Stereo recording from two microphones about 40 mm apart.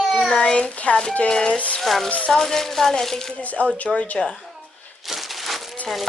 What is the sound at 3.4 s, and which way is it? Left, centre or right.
Speech, left.